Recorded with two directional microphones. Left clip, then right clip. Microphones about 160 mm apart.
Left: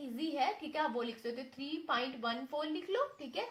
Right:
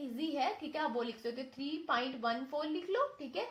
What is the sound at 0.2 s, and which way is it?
A woman's voice, 20° right (ahead or behind).